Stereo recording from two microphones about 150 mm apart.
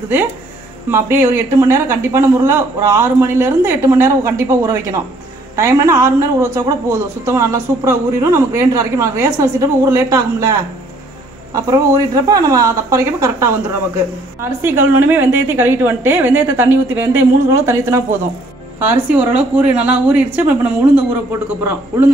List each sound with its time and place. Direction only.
0.8 s a woman's voice: 15° right (ahead or behind)
11.5 s a woman's voice: 20° right (ahead or behind)